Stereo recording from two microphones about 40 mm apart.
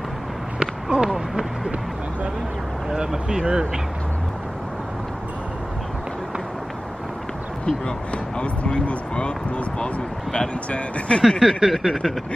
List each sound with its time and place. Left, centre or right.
0.6 s speech: centre
2.9 s speech: centre
7.6 s speech: left
11.2 s a sound: centre